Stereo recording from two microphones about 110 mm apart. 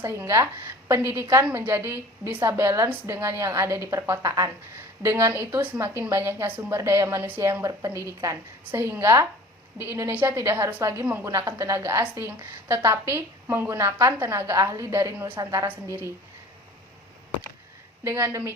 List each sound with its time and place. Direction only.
0.0 s a woman's voice: 25° right (ahead or behind)
18.0 s a woman's voice: 25° right (ahead or behind)